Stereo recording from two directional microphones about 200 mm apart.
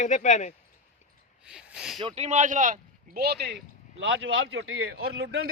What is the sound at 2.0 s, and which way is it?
Speech, 30° right (ahead or behind).